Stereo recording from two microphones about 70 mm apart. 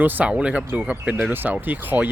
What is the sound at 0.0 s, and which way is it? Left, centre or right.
Speech, right.